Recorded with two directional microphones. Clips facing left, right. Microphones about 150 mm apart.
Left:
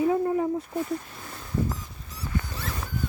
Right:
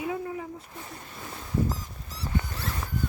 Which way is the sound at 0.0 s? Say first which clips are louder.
Left 9 dB; 45° left (ahead or behind).